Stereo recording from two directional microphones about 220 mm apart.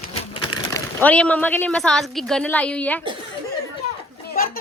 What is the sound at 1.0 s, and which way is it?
A woman's voice, 5° left (ahead or behind).